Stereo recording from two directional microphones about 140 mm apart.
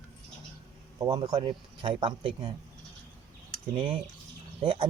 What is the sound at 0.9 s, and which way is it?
Speech, 30° right (ahead or behind).